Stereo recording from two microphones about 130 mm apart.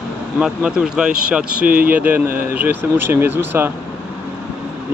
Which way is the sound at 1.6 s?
90° right.